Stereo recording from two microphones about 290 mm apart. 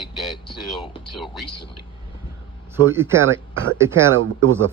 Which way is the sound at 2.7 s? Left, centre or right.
Centre.